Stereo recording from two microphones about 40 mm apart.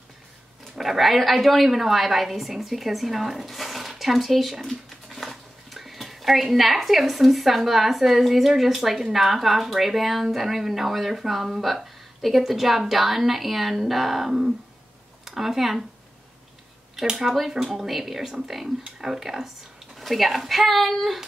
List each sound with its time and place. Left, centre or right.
0.7 s a woman's voice: centre
17.0 s a woman's voice: centre